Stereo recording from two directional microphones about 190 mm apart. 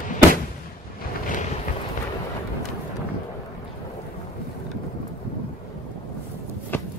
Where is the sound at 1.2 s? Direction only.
40° left (ahead or behind).